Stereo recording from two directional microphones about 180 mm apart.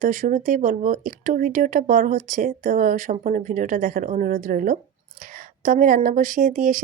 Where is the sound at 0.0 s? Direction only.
45° right (ahead or behind).